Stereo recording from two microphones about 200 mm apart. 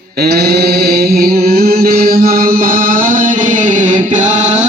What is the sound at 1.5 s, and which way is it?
Chant, 50° right (ahead or behind).